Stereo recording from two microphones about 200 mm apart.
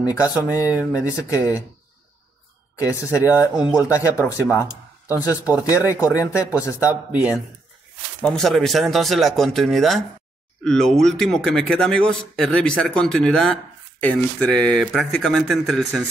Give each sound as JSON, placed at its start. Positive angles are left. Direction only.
{"t": 0.0, "sound": "speech", "side_deg": 15}
{"t": 2.7, "sound": "speech", "side_deg": 15}
{"t": 3.5, "sound": "a man's voice", "side_deg": -5}
{"t": 4.2, "sound": "speech", "side_deg": 15}
{"t": 5.4, "sound": "speech", "side_deg": -5}
{"t": 5.7, "sound": "speech", "side_deg": 15}
{"t": 6.8, "sound": "a man's voice", "side_deg": -5}